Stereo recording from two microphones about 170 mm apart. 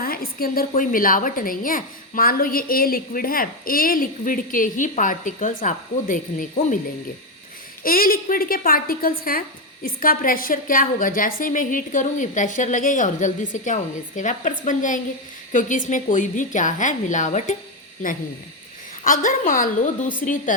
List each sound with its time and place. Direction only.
0.0 s a woman's voice: 60° left (ahead or behind)
7.9 s a woman's voice: 60° left (ahead or behind)
19.0 s a woman's voice: 55° left (ahead or behind)